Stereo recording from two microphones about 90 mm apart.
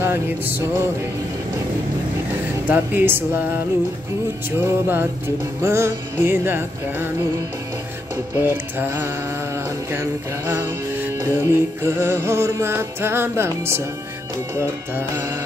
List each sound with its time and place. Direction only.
0.0 s music: 25° right (ahead or behind)
2.7 s music: 25° right (ahead or behind)
4.5 s music: 25° right (ahead or behind)
8.4 s music: 25° right (ahead or behind)